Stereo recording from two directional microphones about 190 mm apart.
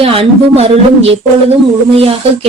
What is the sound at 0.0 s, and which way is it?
Speech, 30° right (ahead or behind).